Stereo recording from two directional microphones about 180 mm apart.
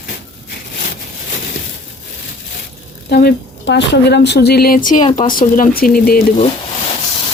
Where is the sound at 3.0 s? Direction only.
60° left (ahead or behind).